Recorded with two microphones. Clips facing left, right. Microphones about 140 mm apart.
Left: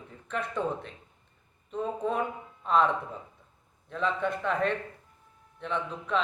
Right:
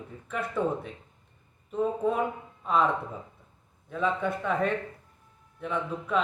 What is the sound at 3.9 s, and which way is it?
A man's voice, 5° right (ahead or behind).